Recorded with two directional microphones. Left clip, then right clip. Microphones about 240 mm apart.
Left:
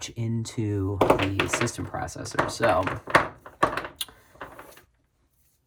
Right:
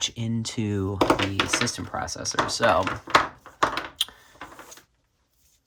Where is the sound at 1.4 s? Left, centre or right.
Right.